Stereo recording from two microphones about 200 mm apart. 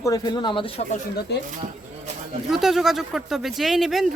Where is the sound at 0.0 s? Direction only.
20° left (ahead or behind).